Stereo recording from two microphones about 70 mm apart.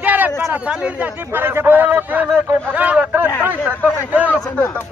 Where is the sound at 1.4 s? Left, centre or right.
Right.